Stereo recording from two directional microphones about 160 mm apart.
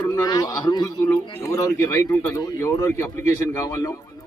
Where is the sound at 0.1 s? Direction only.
25° left (ahead or behind).